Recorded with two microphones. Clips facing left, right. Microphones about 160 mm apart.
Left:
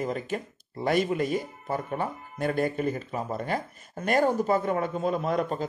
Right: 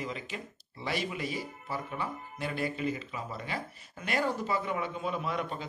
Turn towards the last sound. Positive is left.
turn(degrees=40)  # may be behind; listen again after turning